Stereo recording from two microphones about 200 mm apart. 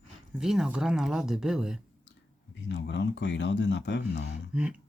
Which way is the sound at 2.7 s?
65° left (ahead or behind).